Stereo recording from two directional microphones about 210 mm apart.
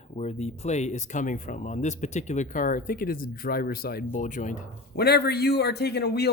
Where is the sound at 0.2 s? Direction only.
30° left (ahead or behind).